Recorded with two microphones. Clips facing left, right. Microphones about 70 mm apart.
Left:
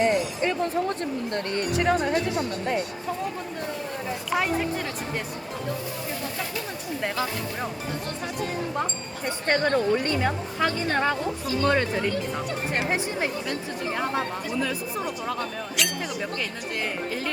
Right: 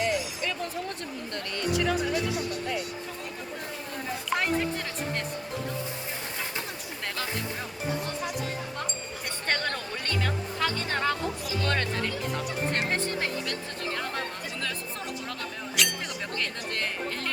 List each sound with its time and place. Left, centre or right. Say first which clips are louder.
0.0 s a sound: left 6 dB; left
1.5 s music: left 3 dB; left
9.5 s speech: left 9 dB; centre